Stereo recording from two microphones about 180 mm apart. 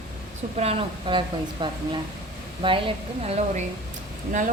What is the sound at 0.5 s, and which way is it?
Speech, 35° right (ahead or behind).